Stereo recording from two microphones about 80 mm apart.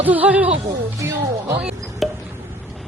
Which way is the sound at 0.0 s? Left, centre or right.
Right.